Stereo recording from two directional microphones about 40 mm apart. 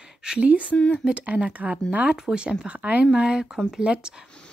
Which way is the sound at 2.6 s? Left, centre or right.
Right.